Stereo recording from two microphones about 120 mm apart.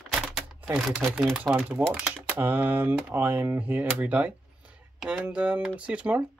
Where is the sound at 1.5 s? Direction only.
10° right (ahead or behind).